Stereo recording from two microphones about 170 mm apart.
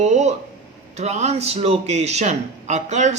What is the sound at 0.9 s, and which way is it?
A man's voice, 40° right (ahead or behind).